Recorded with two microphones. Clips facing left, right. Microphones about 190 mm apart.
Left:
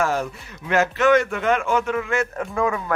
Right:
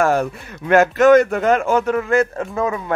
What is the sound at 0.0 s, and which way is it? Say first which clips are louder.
Speech: right 5 dB; 55° right (ahead or behind).